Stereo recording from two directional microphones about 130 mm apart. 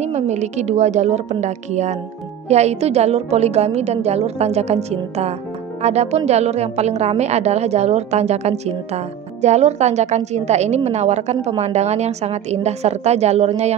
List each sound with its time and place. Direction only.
0.0 s a woman's voice: 60° right (ahead or behind)